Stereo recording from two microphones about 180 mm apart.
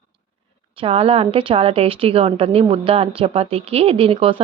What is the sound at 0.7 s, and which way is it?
A woman's voice, 35° right (ahead or behind).